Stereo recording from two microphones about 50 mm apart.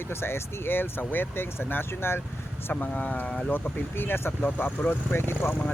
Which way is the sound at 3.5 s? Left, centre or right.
Left.